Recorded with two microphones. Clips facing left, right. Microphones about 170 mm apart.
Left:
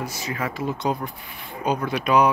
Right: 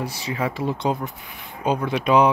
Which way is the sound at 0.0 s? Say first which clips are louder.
Right 3 dB; 30° right (ahead or behind).